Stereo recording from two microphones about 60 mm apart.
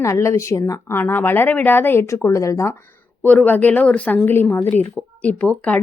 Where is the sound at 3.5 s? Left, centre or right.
Left.